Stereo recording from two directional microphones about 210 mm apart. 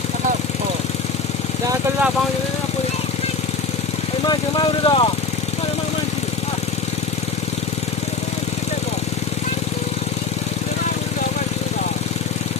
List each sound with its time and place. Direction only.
4.3 s speech: 20° left (ahead or behind)